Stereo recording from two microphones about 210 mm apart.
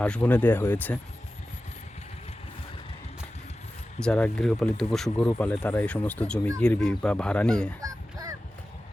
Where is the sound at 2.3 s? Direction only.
30° left (ahead or behind).